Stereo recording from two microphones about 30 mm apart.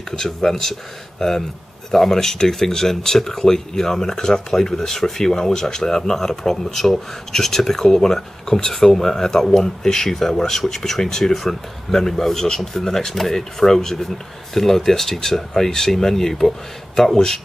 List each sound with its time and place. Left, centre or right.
0.1 s speech: centre
1.9 s speech: centre
11.3 s speech: centre